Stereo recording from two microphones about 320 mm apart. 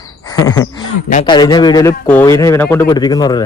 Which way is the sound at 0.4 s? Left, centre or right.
Centre.